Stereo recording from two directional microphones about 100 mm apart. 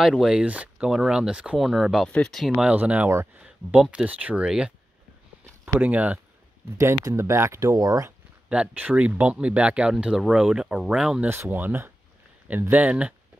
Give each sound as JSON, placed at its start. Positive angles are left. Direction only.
{"t": 0.0, "sound": "speech", "side_deg": -5}
{"t": 2.6, "sound": "speech", "side_deg": -15}
{"t": 5.8, "sound": "speech", "side_deg": -15}
{"t": 6.8, "sound": "speech", "side_deg": -30}
{"t": 8.5, "sound": "speech", "side_deg": -15}
{"t": 11.2, "sound": "speech", "side_deg": -20}